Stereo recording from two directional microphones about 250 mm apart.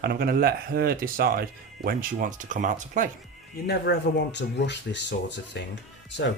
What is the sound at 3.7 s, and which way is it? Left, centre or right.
Speech, left.